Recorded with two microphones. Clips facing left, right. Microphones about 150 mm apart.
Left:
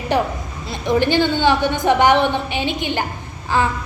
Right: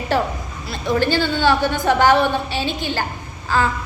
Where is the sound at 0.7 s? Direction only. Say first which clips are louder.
Left 2 dB; 20° left (ahead or behind).